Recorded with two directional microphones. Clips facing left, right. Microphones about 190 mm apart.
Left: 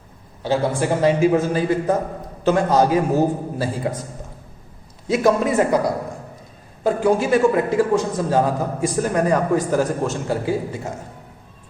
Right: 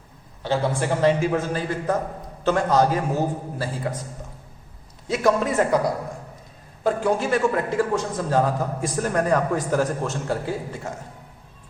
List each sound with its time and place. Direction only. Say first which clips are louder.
0.4 s a man's voice: left 3 dB; 10° left (ahead or behind)
5.0 s a man's voice: left 3 dB; 5° left (ahead or behind)
6.8 s a man's voice: left 4 dB; 5° left (ahead or behind)